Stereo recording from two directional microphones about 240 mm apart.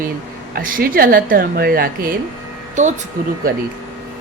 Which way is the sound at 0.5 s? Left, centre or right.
Right.